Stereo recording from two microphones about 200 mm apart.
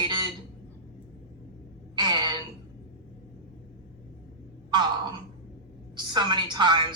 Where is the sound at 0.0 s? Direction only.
20° right (ahead or behind).